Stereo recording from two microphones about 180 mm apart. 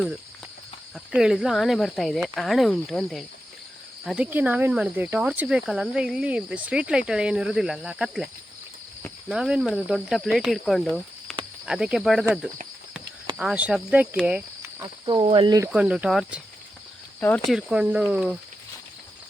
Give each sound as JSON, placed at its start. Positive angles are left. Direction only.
{"t": 0.9, "sound": "speech", "side_deg": 0}
{"t": 9.3, "sound": "speech", "side_deg": -5}
{"t": 15.0, "sound": "speech", "side_deg": -25}
{"t": 15.7, "sound": "speech", "side_deg": -5}
{"t": 17.2, "sound": "speech", "side_deg": 10}